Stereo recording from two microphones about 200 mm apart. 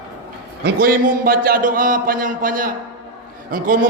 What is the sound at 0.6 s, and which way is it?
A man's voice, 45° right (ahead or behind).